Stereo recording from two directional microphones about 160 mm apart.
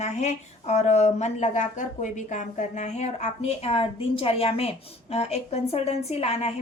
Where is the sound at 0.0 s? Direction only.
45° left (ahead or behind).